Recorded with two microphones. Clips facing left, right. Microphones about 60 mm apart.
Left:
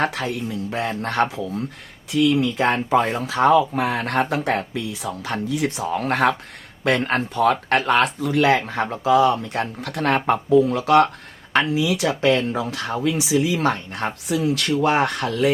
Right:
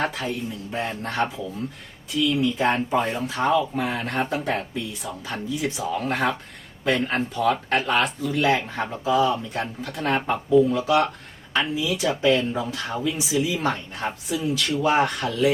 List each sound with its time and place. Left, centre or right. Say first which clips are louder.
0.0 s speech: left 3 dB; left
3.0 s speech: left 3 dB; left
3.4 s speech: left 6 dB; left